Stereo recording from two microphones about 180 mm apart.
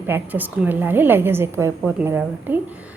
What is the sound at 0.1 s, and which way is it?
A woman's voice, 10° right (ahead or behind).